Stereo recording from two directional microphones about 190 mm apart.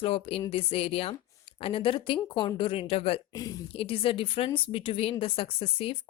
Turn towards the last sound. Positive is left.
turn(degrees=30)  # may be behind; listen again after turning